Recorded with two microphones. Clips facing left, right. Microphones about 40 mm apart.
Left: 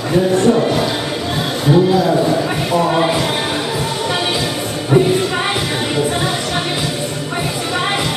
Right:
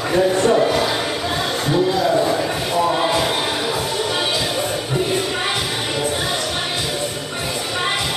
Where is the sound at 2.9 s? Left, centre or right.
Centre.